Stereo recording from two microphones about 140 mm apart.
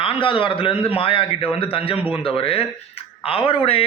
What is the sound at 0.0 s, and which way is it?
A man's voice, 40° left (ahead or behind).